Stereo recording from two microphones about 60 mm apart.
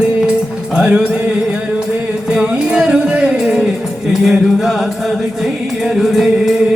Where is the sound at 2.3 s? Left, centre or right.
Centre.